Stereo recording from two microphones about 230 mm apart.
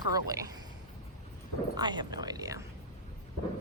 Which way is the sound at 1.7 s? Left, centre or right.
Centre.